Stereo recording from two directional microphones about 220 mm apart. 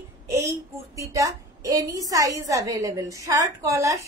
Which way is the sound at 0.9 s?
15° right (ahead or behind).